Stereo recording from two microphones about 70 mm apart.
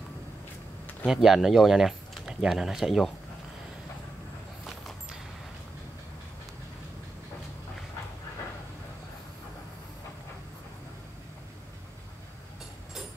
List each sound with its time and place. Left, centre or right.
1.0 s speech: centre